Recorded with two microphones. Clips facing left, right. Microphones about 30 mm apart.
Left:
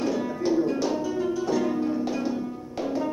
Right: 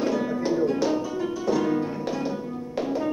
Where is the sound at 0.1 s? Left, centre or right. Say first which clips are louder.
Even; centre.